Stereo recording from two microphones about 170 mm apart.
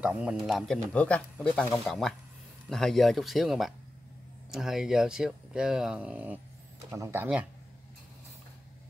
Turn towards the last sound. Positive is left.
turn(degrees=-15)  # may be behind; listen again after turning